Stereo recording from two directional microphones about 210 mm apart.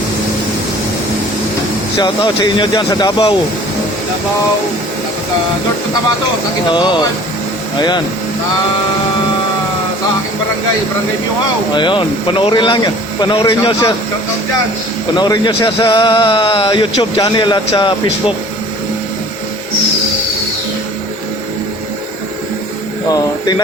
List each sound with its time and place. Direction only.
2.0 s speech: 20° left (ahead or behind)
6.7 s speech: 20° left (ahead or behind)
11.7 s speech: 20° left (ahead or behind)
15.1 s speech: 20° left (ahead or behind)